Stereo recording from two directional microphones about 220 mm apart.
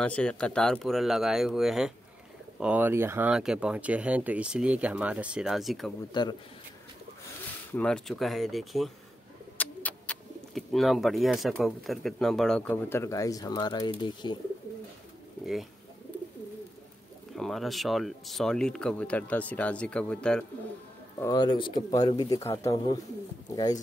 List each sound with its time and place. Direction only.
0.0 s speech: 5° left (ahead or behind)
6.2 s a man's voice: 20° left (ahead or behind)
7.7 s speech: 5° left (ahead or behind); by 14.4 s 20° left (ahead or behind)
17.3 s speech: centre (ahead or behind)
21.2 s a man's voice: 20° left (ahead or behind)